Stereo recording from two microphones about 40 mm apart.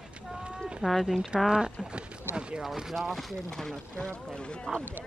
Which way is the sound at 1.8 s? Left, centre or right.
Right.